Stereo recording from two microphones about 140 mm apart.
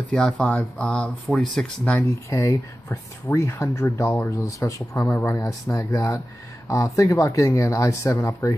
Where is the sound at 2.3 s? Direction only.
20° left (ahead or behind).